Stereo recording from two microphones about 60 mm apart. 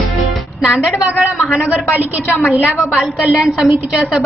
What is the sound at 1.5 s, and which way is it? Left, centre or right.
Speech, left.